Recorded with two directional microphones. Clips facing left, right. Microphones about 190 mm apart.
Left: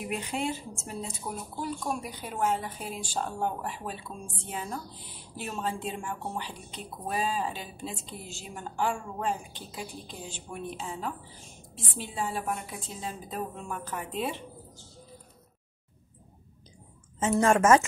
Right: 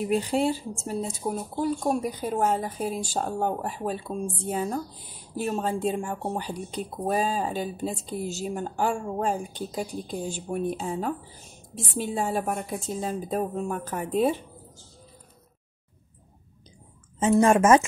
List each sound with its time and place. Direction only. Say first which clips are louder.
0.0 s a woman's voice: right 8 dB; 35° right (ahead or behind)
17.2 s speech: right 4 dB; 20° right (ahead or behind)